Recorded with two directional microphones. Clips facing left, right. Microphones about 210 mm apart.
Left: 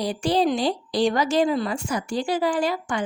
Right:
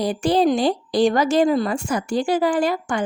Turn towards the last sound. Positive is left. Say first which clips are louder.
# right 3 dB
turn(degrees=-50)  # may be behind; listen again after turning